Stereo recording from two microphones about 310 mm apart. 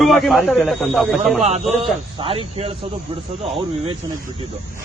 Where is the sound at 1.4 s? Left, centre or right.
Right.